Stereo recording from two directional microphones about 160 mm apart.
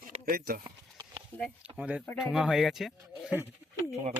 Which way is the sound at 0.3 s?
65° right (ahead or behind).